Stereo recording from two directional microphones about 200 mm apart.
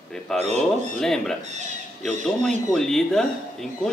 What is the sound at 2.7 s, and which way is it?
Speech, centre (ahead or behind).